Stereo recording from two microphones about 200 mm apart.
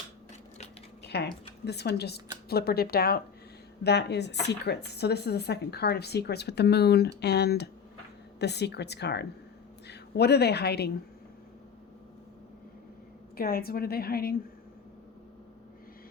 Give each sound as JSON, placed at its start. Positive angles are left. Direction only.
{"t": 1.0, "sound": "a sound", "side_deg": 55}
{"t": 1.6, "sound": "a woman's voice", "side_deg": 55}
{"t": 13.3, "sound": "speech", "side_deg": 50}